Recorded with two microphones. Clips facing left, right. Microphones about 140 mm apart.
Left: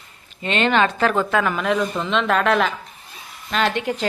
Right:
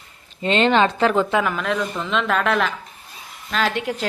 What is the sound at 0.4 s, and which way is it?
Speech, 30° right (ahead or behind).